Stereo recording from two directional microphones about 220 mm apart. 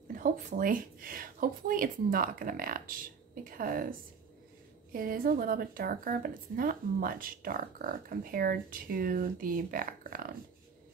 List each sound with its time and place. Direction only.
0.1 s speech: 40° right (ahead or behind)
4.9 s speech: 40° right (ahead or behind)